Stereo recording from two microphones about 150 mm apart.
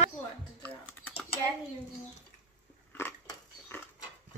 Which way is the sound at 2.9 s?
15° left (ahead or behind).